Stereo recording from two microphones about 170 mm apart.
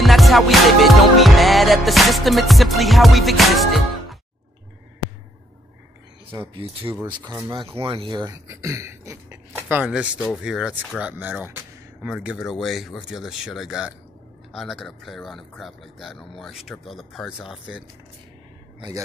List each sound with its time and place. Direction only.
0.0 s music: centre (ahead or behind)
6.5 s speech: 30° right (ahead or behind)
8.5 s beatboxing: 15° right (ahead or behind)
10.3 s speech: 5° right (ahead or behind)
18.8 s a man's voice: 25° right (ahead or behind)